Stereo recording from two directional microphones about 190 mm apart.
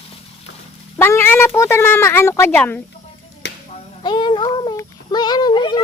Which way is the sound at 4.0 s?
25° left (ahead or behind).